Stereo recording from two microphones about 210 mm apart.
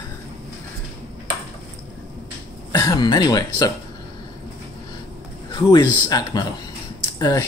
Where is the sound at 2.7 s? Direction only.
15° left (ahead or behind).